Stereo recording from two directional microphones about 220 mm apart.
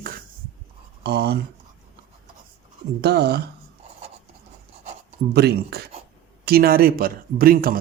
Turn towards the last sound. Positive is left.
turn(degrees=-40)  # may be behind; listen again after turning